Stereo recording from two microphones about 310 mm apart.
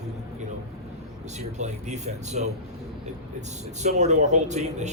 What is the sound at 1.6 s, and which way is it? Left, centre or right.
Speech, right.